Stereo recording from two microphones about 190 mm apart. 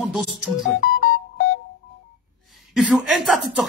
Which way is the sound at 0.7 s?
50° left (ahead or behind).